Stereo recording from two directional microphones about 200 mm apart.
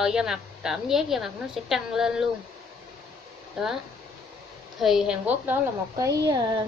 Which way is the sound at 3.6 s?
5° right (ahead or behind).